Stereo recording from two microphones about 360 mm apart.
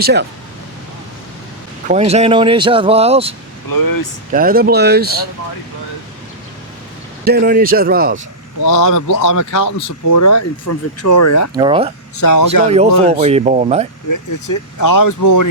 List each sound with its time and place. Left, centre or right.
0.0 s speech: right
1.9 s speech: centre
3.7 s speech: left
4.3 s speech: right
7.3 s speech: right
8.6 s speech: left
11.5 s speech: centre
12.2 s speech: left
12.6 s speech: centre
14.1 s speech: left